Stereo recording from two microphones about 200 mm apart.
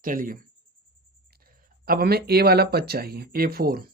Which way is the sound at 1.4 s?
50° right (ahead or behind).